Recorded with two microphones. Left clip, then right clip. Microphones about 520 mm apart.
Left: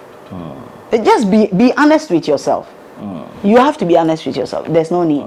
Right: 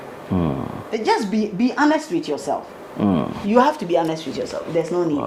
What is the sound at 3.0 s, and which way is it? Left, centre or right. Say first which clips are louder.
Speech: right 8 dB; right.